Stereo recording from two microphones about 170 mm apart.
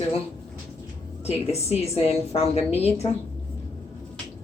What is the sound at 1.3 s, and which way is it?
A woman's voice, 40° left (ahead or behind).